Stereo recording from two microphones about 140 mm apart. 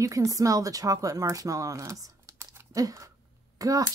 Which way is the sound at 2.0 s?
25° right (ahead or behind).